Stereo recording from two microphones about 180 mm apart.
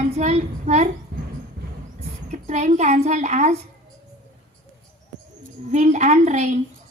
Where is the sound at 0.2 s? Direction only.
40° right (ahead or behind).